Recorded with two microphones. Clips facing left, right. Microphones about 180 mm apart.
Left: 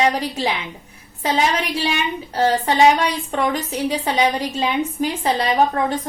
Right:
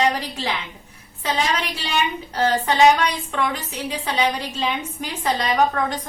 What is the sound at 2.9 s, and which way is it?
Speech, 40° left (ahead or behind).